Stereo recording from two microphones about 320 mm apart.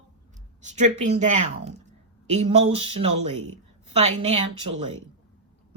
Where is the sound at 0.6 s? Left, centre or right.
Right.